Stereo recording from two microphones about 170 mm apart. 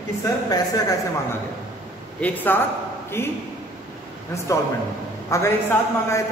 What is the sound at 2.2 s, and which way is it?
A man's voice, 10° left (ahead or behind).